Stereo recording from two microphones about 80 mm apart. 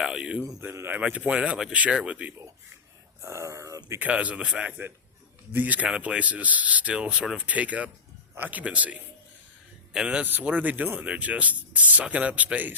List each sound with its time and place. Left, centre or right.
0.0 s speech: centre
0.6 s speech: right
0.9 s speech: centre
3.2 s speech: right
4.0 s speech: centre